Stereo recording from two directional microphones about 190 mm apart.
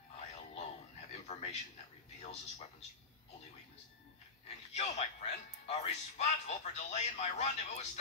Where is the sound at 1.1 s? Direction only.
35° left (ahead or behind).